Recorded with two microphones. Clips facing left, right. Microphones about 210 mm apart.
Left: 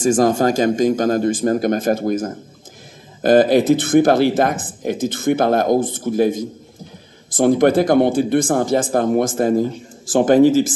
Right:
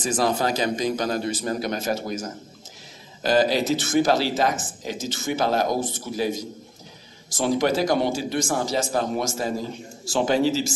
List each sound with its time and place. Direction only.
0.0 s speech: 45° left (ahead or behind)